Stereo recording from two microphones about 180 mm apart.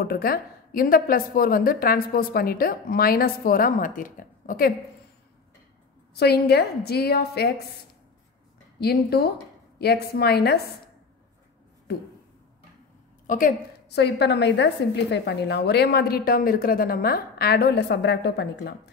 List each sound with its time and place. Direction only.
0.0 s a woman's voice: 55° left (ahead or behind)
6.1 s a woman's voice: 65° left (ahead or behind)
8.7 s a woman's voice: 60° left (ahead or behind)
13.3 s a woman's voice: 50° left (ahead or behind)
13.9 s a woman's voice: 70° left (ahead or behind)